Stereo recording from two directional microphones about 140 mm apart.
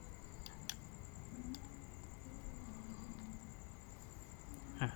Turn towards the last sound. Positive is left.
turn(degrees=-40)  # may be behind; listen again after turning